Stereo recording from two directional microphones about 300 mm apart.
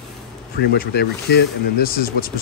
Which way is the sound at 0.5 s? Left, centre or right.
Left.